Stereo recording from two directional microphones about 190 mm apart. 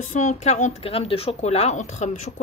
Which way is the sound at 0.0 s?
40° left (ahead or behind).